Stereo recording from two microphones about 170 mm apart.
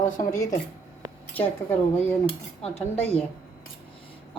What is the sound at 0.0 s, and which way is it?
Speech, 50° left (ahead or behind).